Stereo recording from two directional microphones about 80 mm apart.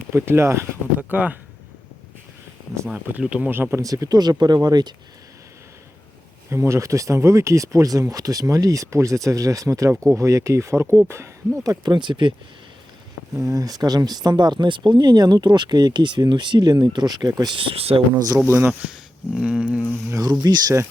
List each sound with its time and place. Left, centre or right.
0.1 s speech: right
1.1 s speech: centre
2.9 s speech: centre
3.5 s speech: right
3.8 s speech: right
4.2 s speech: right
6.5 s speech: right
11.6 s speech: right
13.3 s speech: right
17.5 s speech: right
18.4 s speech: right
18.9 s speech: centre
19.8 s speech: right
20.4 s speech: right